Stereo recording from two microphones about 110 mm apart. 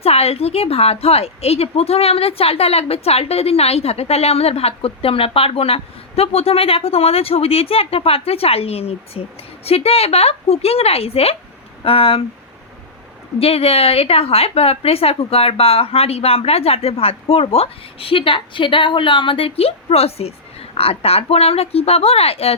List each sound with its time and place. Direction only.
0.0 s a woman's voice: 65° left (ahead or behind)
13.4 s a woman's voice: 60° left (ahead or behind)